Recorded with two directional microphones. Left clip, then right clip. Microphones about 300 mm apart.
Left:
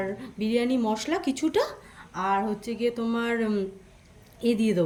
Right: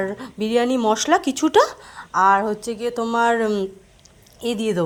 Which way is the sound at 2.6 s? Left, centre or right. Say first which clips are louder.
Right 4 dB; centre.